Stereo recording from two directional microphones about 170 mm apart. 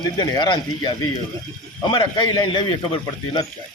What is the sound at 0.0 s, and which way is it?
Speech, 25° left (ahead or behind).